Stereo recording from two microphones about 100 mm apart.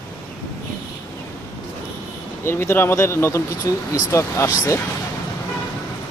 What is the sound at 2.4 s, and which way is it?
Speech, 25° left (ahead or behind).